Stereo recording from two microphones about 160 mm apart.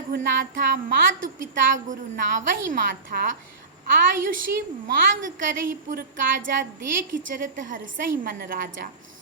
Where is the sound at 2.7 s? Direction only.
65° right (ahead or behind).